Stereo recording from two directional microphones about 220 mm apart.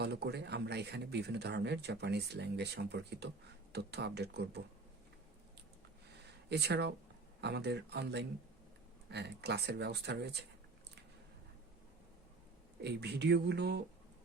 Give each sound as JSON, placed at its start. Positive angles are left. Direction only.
{"t": 0.0, "sound": "speech", "side_deg": -50}
{"t": 6.5, "sound": "speech", "side_deg": -50}
{"t": 12.8, "sound": "speech", "side_deg": -50}